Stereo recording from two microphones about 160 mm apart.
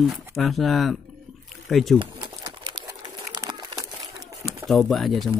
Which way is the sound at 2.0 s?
30° right (ahead or behind).